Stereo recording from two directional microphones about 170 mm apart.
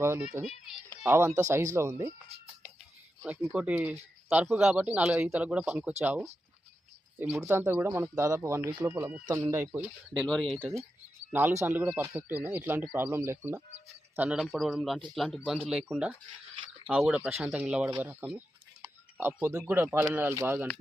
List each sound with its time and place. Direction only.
0.0 s speech: 15° right (ahead or behind)
2.3 s speech: 35° right (ahead or behind)
3.2 s speech: 5° right (ahead or behind)
10.5 s speech: centre (ahead or behind)
11.3 s speech: 10° right (ahead or behind)